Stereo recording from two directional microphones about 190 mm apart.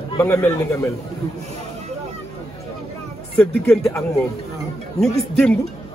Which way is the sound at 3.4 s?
5° left (ahead or behind).